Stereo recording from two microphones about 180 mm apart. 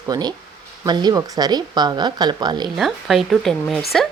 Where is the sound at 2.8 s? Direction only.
Centre (ahead or behind).